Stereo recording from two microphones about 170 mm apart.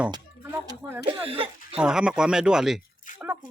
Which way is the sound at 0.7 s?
15° right (ahead or behind).